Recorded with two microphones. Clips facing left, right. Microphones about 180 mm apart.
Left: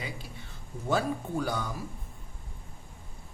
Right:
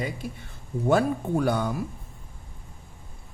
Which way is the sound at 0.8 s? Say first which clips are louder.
Right 6 dB; 60° right (ahead or behind).